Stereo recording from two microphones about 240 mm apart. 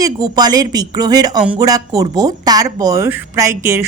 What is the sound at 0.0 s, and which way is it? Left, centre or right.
Speech, centre.